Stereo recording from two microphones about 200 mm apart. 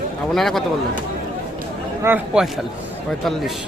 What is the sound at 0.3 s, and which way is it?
Speech, centre (ahead or behind).